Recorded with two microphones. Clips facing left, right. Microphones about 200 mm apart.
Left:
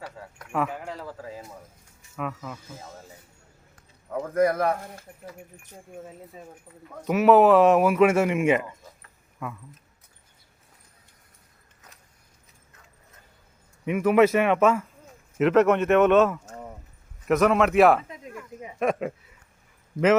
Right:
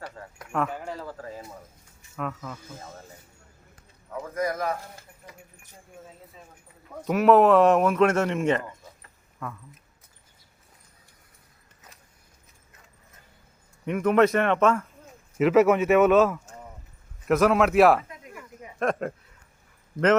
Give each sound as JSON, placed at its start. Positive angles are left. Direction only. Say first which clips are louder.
{"t": 0.5, "sound": "speech", "louder": "even", "side_deg": 5}
{"t": 4.4, "sound": "speech", "louder": "left 6 dB", "side_deg": 60}
{"t": 7.0, "sound": "speech", "louder": "left 1 dB", "side_deg": 0}
{"t": 13.8, "sound": "speech", "louder": "left 1 dB", "side_deg": 5}